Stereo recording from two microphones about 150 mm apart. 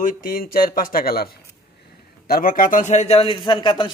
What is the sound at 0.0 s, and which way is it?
Speech, 65° left (ahead or behind).